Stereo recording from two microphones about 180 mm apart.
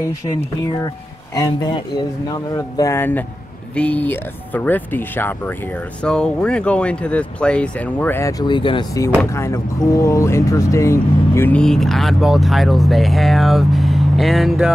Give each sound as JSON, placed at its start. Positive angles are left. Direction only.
{"t": 1.3, "sound": "speech", "side_deg": 20}
{"t": 9.2, "sound": "speech", "side_deg": 15}